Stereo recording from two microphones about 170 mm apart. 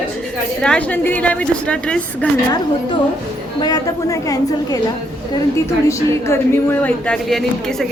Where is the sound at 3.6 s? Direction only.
20° left (ahead or behind).